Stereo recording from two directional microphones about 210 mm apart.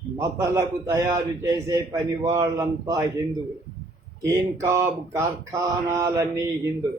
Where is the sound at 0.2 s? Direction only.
15° right (ahead or behind).